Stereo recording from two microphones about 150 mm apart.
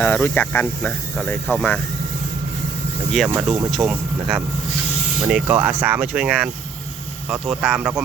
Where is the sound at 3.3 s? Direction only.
5° right (ahead or behind).